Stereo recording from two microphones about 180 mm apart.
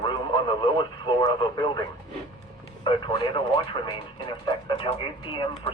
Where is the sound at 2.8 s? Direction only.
25° left (ahead or behind).